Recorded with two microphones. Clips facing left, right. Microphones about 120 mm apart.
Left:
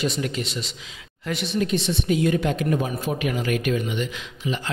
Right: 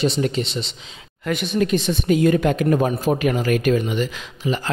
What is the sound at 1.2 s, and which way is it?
A woman's voice, 50° right (ahead or behind).